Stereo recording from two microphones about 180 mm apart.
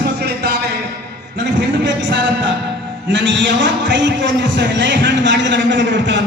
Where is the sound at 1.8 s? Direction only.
85° right.